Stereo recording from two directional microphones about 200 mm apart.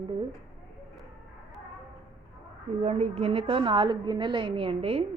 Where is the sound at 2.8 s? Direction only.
30° right (ahead or behind).